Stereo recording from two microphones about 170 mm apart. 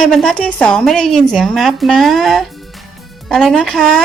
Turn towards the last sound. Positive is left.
turn(degrees=0)  # may be behind; listen again after turning